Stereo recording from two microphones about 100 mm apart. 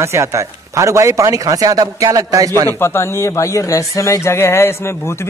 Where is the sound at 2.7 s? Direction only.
25° left (ahead or behind).